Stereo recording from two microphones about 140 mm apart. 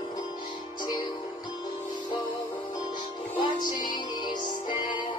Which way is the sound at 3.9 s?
35° left (ahead or behind).